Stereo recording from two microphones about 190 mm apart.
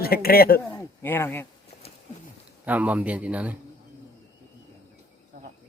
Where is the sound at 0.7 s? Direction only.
10° left (ahead or behind).